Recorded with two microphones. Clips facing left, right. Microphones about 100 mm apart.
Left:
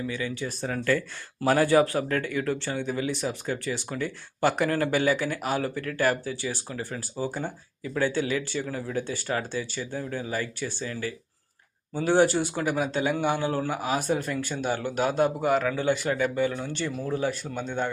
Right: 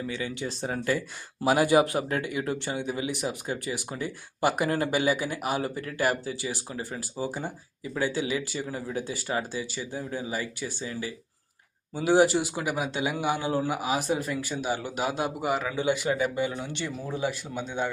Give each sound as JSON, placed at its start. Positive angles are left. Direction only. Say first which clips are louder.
{"t": 0.3, "sound": "a man's voice", "louder": "left 1 dB", "side_deg": -20}
{"t": 11.9, "sound": "a man's voice", "louder": "even", "side_deg": -10}